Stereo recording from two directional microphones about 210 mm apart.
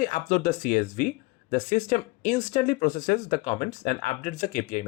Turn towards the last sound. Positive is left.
turn(degrees=35)  # may be behind; listen again after turning